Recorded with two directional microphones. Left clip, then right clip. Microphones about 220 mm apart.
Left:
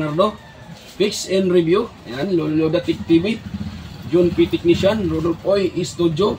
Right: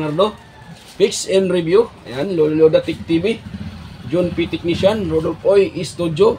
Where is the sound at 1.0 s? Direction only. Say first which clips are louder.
Right 4 dB; 45° right (ahead or behind).